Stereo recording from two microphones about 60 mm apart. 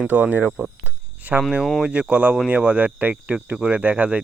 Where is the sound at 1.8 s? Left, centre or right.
Right.